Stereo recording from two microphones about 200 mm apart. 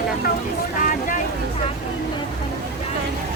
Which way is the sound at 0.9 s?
40° left (ahead or behind).